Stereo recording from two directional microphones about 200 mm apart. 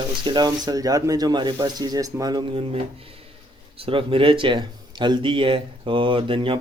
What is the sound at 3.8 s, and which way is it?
Speech, 25° right (ahead or behind).